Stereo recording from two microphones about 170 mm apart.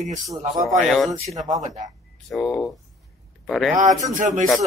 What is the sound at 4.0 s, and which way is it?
Speech, 45° right (ahead or behind).